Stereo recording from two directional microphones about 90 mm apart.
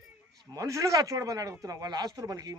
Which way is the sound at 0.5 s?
40° right (ahead or behind).